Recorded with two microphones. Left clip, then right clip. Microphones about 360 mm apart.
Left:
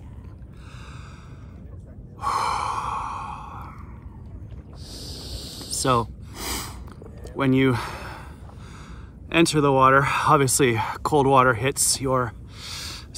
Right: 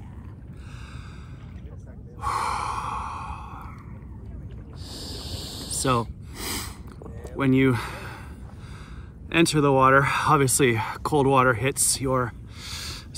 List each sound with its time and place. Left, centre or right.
2.1 s gasp: centre
4.8 s a sound: right
5.8 s gasp: centre
7.3 s speech: centre
9.3 s speech: centre